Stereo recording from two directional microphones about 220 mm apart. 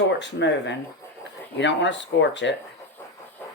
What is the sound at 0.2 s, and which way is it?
Speech, 50° left (ahead or behind).